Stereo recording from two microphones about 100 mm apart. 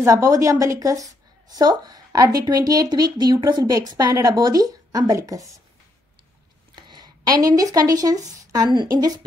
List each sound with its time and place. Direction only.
0.0 s a woman's voice: 35° right (ahead or behind)
6.7 s speech: 45° right (ahead or behind)